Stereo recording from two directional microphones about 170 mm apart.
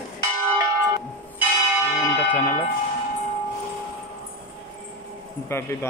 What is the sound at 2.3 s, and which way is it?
Speech, 10° left (ahead or behind).